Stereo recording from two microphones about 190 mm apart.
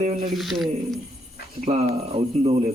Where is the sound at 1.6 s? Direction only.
35° right (ahead or behind).